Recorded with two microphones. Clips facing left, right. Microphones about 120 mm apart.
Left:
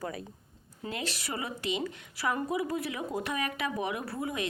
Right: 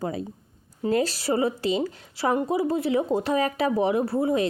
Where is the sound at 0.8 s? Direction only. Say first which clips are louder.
Right 13 dB; 40° right (ahead or behind).